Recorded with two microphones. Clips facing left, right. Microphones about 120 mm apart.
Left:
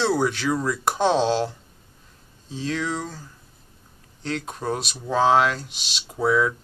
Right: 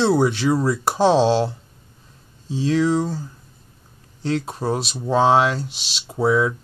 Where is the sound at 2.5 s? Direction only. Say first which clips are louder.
Right 7 dB; centre (ahead or behind).